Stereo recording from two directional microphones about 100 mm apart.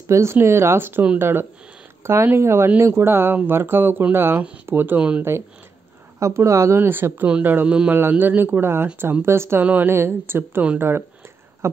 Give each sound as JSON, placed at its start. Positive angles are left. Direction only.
{"t": 0.0, "sound": "speech", "side_deg": -30}
{"t": 6.1, "sound": "speech", "side_deg": -30}